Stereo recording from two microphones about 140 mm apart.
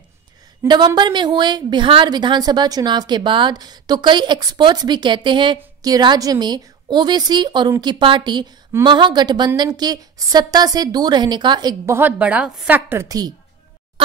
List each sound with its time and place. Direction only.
0.7 s a woman's voice: 30° right (ahead or behind)
11.8 s a woman's voice: 15° right (ahead or behind)